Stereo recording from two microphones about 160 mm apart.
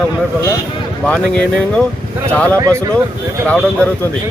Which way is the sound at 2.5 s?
20° right (ahead or behind).